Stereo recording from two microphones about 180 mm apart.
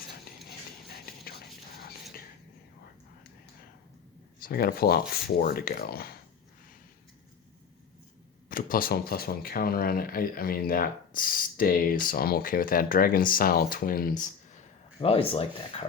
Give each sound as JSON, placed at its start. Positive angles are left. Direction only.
{"t": 4.4, "sound": "speech", "side_deg": 55}
{"t": 8.4, "sound": "speech", "side_deg": 50}
{"t": 15.0, "sound": "speech", "side_deg": 30}